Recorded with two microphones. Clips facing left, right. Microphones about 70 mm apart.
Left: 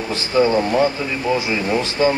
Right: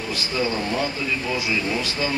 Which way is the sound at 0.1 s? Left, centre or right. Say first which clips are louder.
Left 9 dB; left.